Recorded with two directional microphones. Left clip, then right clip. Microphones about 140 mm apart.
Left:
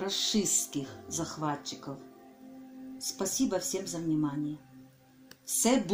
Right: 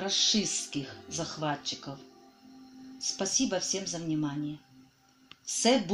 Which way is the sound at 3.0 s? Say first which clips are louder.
Right 2 dB; 40° right (ahead or behind).